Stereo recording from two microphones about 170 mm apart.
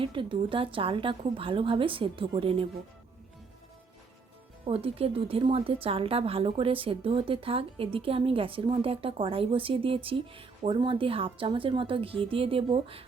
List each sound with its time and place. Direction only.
0.0 s a woman's voice: 30° right (ahead or behind)
4.6 s a woman's voice: 35° right (ahead or behind)